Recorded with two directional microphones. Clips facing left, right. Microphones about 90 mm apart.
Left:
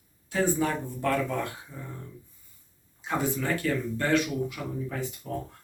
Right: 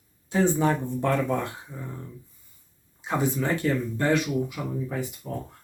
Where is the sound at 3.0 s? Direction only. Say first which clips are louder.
Right 3 dB; 20° right (ahead or behind).